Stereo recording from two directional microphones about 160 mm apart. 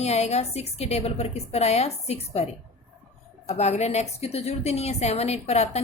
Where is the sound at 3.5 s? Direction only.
45° left (ahead or behind).